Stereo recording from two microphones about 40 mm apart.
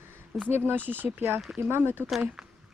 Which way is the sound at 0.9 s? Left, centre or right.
Right.